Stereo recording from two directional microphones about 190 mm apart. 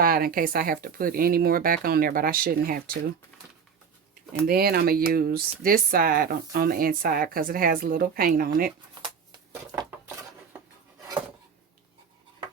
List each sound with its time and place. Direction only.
0.0 s speech: 50° right (ahead or behind)
4.4 s speech: 55° right (ahead or behind)
9.0 s a sound: 20° right (ahead or behind)